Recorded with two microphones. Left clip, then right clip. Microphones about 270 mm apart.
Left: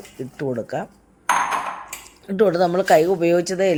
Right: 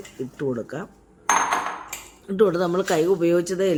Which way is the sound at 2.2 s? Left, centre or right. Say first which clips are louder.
Left 3 dB; centre.